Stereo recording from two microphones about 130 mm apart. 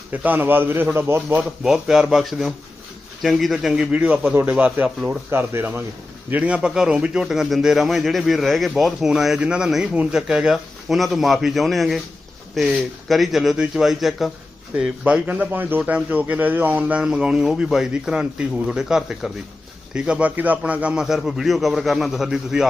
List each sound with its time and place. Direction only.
0.1 s speech: 15° right (ahead or behind)
1.6 s a man's voice: 5° right (ahead or behind)